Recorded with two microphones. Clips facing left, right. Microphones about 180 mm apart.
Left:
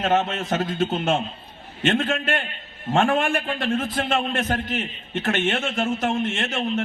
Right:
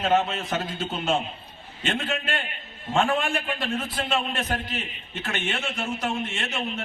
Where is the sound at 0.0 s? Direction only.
50° left (ahead or behind).